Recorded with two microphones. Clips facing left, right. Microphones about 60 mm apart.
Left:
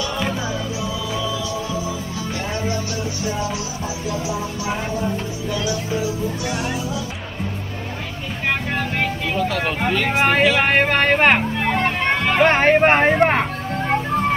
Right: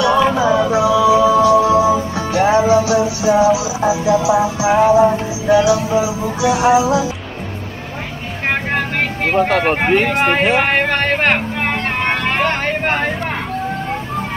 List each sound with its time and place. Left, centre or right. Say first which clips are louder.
0.0 s music: right 11 dB; right
8.5 s vehicle: right 4 dB; right
10.6 s speech: right 1 dB; centre
11.6 s vehicle: right 1 dB; right
12.4 s speech: left 4 dB; left